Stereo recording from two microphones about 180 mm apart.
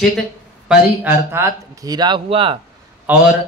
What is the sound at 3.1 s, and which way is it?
Speech, 10° right (ahead or behind).